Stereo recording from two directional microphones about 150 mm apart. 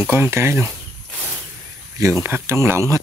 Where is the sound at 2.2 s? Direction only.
15° right (ahead or behind).